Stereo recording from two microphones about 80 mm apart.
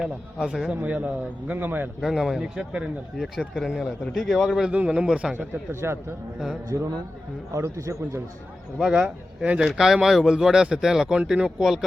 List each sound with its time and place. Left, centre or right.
0.0 s speech: centre
0.7 s a man's voice: centre
2.0 s a man's voice: centre
5.8 s a man's voice: right
6.7 s a man's voice: right
8.8 s speech: centre